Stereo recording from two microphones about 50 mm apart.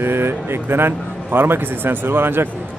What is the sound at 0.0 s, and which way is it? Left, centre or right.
A man's voice, right.